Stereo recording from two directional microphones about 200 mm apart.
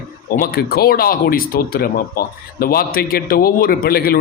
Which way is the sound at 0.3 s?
50° left (ahead or behind).